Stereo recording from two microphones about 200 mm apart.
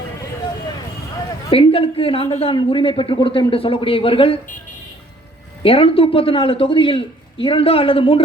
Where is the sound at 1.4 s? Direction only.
25° left (ahead or behind).